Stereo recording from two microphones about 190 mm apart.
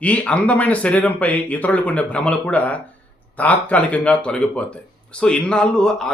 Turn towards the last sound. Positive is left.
turn(degrees=5)  # may be behind; listen again after turning